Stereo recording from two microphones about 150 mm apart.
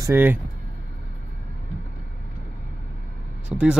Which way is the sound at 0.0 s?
15° right (ahead or behind).